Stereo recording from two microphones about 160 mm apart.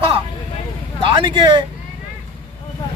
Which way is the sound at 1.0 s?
30° right (ahead or behind).